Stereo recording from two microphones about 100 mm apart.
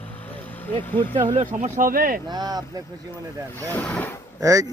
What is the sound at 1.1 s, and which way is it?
Speech, 60° right (ahead or behind).